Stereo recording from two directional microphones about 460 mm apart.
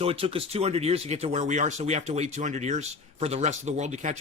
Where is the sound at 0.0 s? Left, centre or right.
Centre.